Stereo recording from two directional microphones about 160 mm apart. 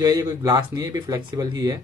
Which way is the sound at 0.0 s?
25° right (ahead or behind).